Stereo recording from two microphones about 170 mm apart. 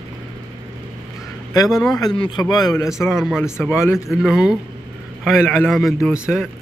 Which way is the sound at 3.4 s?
15° left (ahead or behind).